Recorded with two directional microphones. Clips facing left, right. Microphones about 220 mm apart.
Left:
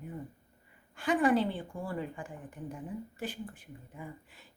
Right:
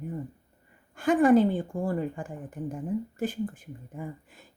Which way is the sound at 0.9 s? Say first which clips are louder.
Right 7 dB; 45° right (ahead or behind).